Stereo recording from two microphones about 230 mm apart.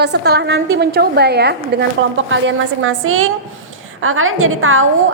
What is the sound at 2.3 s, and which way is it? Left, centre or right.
A woman's voice, right.